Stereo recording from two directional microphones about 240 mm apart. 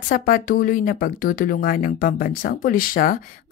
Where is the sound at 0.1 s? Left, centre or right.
Left.